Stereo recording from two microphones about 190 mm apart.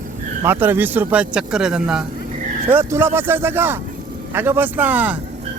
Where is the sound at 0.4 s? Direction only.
10° right (ahead or behind).